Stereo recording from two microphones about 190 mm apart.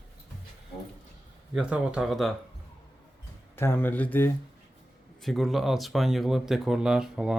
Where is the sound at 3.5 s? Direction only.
10° left (ahead or behind).